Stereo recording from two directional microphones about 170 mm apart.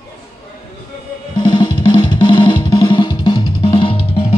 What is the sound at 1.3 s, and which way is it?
Drum, 25° left (ahead or behind).